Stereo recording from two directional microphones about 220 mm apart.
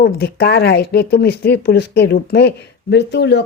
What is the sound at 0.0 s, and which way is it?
A woman's voice, 45° left (ahead or behind).